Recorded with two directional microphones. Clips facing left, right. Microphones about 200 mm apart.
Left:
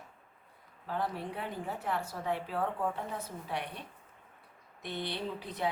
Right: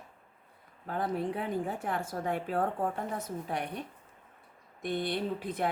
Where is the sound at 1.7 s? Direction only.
50° right (ahead or behind).